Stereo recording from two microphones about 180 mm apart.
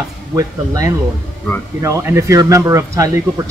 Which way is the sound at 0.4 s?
20° right (ahead or behind).